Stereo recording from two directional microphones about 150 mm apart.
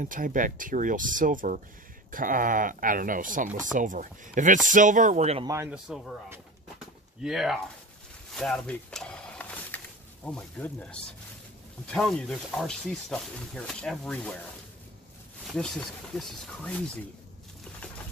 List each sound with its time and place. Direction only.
0.0 s speech: 60° right (ahead or behind)
5.4 s speech: 20° right (ahead or behind)
5.7 s speech: centre (ahead or behind)
7.2 s speech: 5° right (ahead or behind)
8.4 s a sound: 5° left (ahead or behind)
10.2 s speech: 5° left (ahead or behind)
15.4 s speech: 5° left (ahead or behind)